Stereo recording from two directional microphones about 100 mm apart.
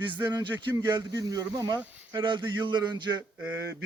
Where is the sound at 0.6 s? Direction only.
50° right (ahead or behind).